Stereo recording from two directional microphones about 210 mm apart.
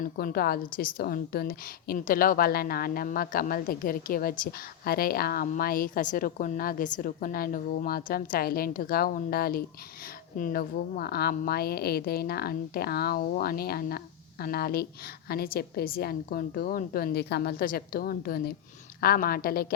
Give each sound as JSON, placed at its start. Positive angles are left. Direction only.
{"t": 0.0, "sound": "a woman's voice", "side_deg": 45}